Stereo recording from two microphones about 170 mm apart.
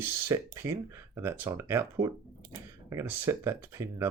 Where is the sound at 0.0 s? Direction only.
15° right (ahead or behind).